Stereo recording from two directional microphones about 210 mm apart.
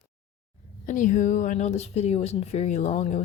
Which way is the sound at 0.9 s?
35° left (ahead or behind).